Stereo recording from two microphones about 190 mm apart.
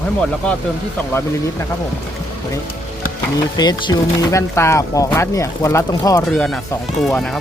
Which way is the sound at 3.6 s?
25° left (ahead or behind).